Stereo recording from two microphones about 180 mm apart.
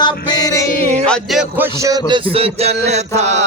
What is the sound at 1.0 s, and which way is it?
Music, centre (ahead or behind).